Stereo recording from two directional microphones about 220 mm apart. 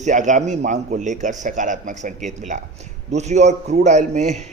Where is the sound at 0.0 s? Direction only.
35° right (ahead or behind).